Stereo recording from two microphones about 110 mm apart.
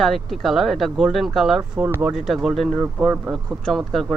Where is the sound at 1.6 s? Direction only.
20° right (ahead or behind).